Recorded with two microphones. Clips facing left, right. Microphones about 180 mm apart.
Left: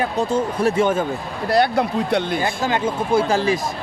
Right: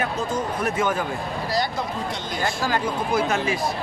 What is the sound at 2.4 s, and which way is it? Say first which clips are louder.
Speech: left 3 dB; 20° left (ahead or behind).